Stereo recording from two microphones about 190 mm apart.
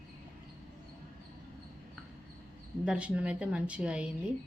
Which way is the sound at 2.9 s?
5° right (ahead or behind).